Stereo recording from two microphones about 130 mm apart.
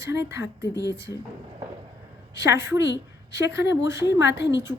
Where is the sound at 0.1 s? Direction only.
20° right (ahead or behind).